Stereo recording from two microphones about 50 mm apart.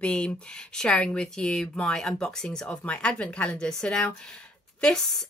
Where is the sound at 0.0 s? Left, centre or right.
Left.